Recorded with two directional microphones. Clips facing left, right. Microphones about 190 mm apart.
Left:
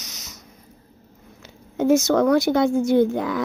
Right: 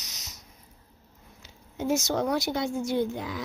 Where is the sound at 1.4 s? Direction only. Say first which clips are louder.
Left 10 dB; 55° left (ahead or behind).